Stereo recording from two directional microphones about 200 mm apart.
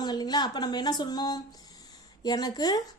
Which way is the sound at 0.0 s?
20° left (ahead or behind).